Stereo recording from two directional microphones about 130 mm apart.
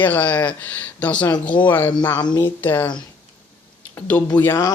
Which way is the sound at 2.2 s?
30° left (ahead or behind).